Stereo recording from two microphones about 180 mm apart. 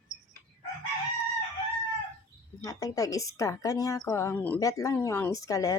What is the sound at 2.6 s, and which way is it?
A woman's voice, 20° left (ahead or behind).